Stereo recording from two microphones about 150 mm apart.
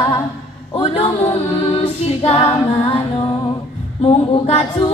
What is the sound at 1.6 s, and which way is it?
A capella, 40° left (ahead or behind).